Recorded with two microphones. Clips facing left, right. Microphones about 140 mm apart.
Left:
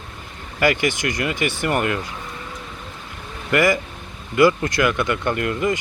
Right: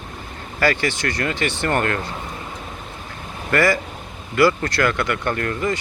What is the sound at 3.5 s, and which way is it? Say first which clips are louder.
Speech: even; 15° left (ahead or behind).